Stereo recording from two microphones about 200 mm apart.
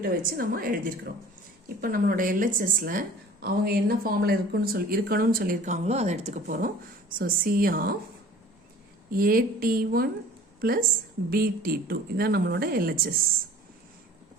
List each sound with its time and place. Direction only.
0.0 s speech: 45° right (ahead or behind)
9.0 s a woman's voice: 45° right (ahead or behind)